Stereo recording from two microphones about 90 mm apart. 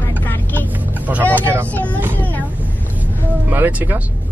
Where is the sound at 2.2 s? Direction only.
20° left (ahead or behind).